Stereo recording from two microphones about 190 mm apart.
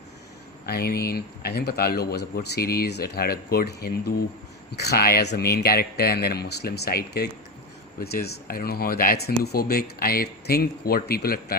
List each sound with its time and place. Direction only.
0.6 s speech: 55° left (ahead or behind)